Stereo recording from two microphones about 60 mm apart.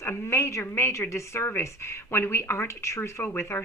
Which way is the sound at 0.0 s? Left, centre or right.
Left.